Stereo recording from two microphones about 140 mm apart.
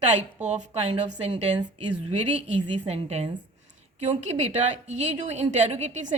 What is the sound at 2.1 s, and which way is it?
A woman's voice, 50° right (ahead or behind).